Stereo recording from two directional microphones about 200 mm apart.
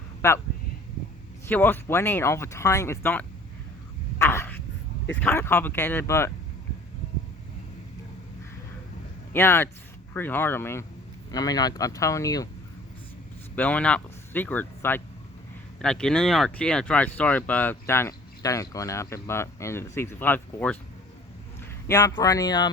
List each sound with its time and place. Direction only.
0.2 s speech: 15° left (ahead or behind)
1.5 s speech: 10° left (ahead or behind)
4.2 s a sound: 15° left (ahead or behind)
5.2 s speech: 10° left (ahead or behind)
9.3 s speech: 10° left (ahead or behind)
13.6 s speech: 5° left (ahead or behind)
21.8 s speech: 15° left (ahead or behind)